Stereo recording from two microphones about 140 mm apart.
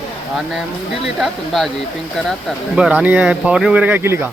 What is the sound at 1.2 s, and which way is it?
Speech, centre (ahead or behind).